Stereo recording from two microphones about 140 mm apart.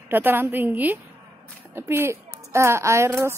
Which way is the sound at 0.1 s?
15° right (ahead or behind).